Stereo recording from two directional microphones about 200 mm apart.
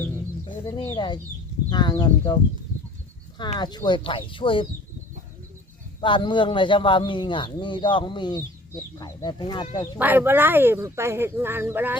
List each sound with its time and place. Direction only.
0.4 s a man's voice: 20° left (ahead or behind)
3.6 s a man's voice: 20° left (ahead or behind)
6.0 s a man's voice: 25° left (ahead or behind)
10.0 s speech: 10° right (ahead or behind)